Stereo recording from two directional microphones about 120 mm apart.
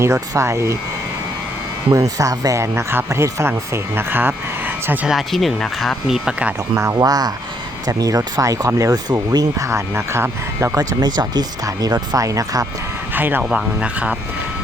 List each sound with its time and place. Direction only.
0.0 s speech: 25° right (ahead or behind)
1.9 s speech: 30° right (ahead or behind)
5.1 s speech: centre (ahead or behind)
6.7 s speech: 25° right (ahead or behind)
10.8 s speech: 35° right (ahead or behind)
13.1 s speech: 15° right (ahead or behind)